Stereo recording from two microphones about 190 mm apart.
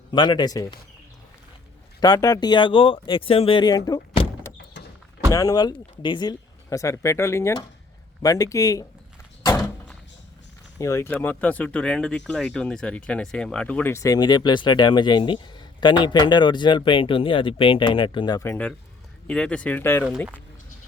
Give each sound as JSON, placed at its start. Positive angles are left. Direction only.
{"t": 0.1, "sound": "speech", "side_deg": 25}
{"t": 2.0, "sound": "speech", "side_deg": 20}
{"t": 5.3, "sound": "speech", "side_deg": 20}
{"t": 9.6, "sound": "door", "side_deg": 5}
{"t": 10.8, "sound": "speech", "side_deg": 15}